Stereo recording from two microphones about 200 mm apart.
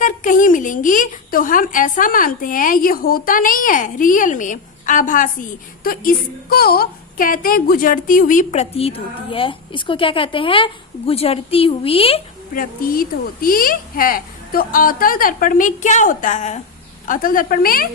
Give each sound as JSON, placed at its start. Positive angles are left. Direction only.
{"t": 0.0, "sound": "a woman's voice", "side_deg": 40}
{"t": 12.5, "sound": "a woman's voice", "side_deg": 45}